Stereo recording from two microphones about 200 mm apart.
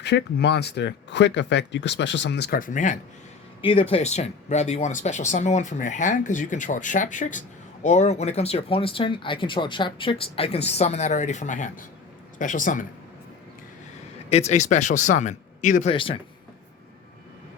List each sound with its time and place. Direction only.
0.0 s speech: 55° left (ahead or behind); by 3.0 s 40° left (ahead or behind)
3.6 s speech: 25° left (ahead or behind)
14.3 s speech: 30° left (ahead or behind)
15.9 s speech: 25° left (ahead or behind)